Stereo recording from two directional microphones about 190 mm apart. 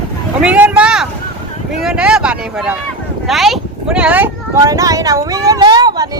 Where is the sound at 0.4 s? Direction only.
5° right (ahead or behind).